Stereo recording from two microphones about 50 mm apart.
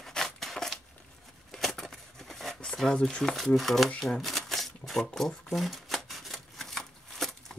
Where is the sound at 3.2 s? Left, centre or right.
Centre.